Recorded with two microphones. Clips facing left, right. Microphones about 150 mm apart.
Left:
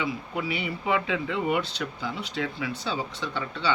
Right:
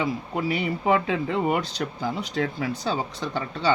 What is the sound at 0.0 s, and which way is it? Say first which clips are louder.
Speech: right 4 dB; 40° right (ahead or behind).